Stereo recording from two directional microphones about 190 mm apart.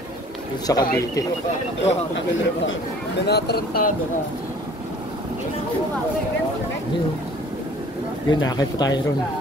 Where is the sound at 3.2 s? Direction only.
60° left (ahead or behind).